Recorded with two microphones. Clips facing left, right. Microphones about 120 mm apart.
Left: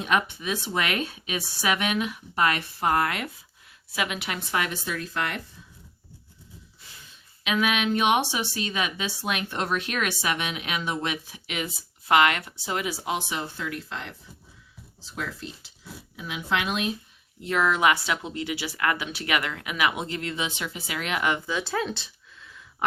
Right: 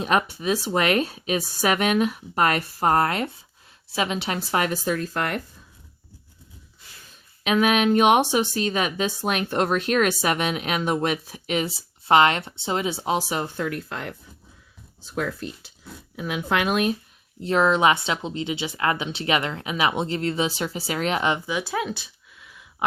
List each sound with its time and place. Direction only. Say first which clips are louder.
0.0 s speech: right 3 dB; 40° right (ahead or behind)
7.4 s speech: right 5 dB; 40° right (ahead or behind)
17.4 s speech: right 4 dB; 30° right (ahead or behind); by 22.6 s 10° right (ahead or behind)